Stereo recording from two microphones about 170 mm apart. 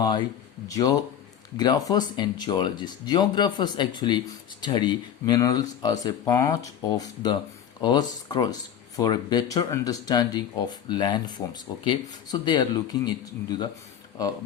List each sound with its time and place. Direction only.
0.7 s speech: 20° left (ahead or behind)